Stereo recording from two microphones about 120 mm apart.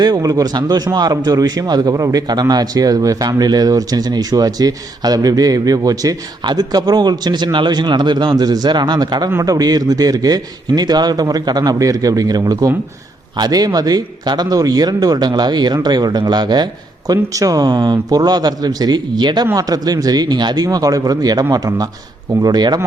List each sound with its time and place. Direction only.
0.0 s a man's voice: 35° right (ahead or behind)